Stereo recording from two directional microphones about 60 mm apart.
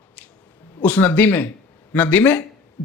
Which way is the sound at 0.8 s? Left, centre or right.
Left.